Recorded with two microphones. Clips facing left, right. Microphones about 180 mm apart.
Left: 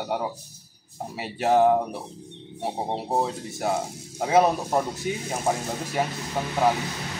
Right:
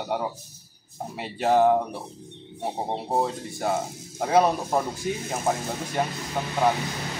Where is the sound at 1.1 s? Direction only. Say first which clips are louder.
Even; centre (ahead or behind).